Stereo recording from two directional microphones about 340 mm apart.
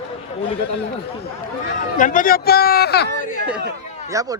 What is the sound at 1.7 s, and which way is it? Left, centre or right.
Speech, left.